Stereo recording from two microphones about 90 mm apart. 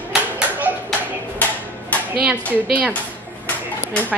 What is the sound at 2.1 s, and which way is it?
Speech, 15° right (ahead or behind).